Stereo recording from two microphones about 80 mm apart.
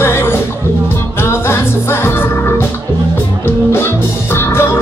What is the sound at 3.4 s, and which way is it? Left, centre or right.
Music, left.